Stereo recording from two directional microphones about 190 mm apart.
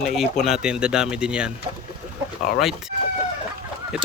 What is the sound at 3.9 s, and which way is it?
Speech, 5° right (ahead or behind).